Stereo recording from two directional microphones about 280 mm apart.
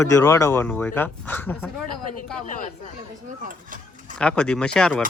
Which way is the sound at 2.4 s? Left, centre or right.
Left.